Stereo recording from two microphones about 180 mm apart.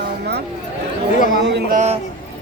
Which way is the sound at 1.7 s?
40° right (ahead or behind).